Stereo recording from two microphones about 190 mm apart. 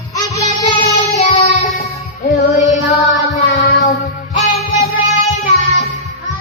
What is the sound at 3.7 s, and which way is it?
Child singing, 55° left (ahead or behind).